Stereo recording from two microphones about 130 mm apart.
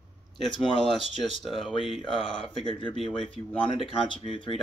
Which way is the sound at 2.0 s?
45° left (ahead or behind).